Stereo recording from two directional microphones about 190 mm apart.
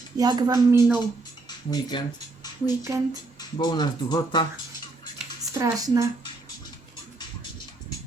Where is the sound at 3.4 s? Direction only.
25° left (ahead or behind).